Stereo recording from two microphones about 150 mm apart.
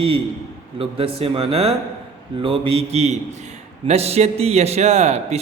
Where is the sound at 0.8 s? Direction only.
40° right (ahead or behind).